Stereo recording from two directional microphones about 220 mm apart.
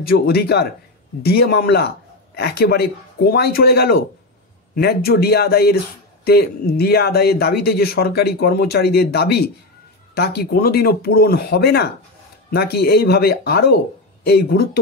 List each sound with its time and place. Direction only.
0.0 s speech: 45° left (ahead or behind)